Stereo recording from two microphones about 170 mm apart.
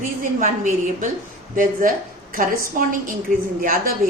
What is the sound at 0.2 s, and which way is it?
Speech, 50° right (ahead or behind).